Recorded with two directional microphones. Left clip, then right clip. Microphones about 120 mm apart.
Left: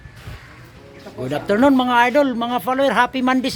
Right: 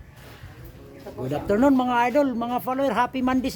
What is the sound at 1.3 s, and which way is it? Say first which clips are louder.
A man's voice: left 5 dB; 10° left (ahead or behind).